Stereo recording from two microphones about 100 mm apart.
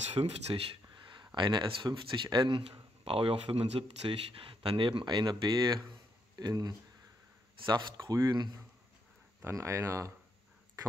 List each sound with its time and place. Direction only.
0.1 s speech: 85° right
0.9 s a sound: 50° right (ahead or behind)
1.9 s speech: 55° right (ahead or behind)
9.4 s speech: 30° right (ahead or behind)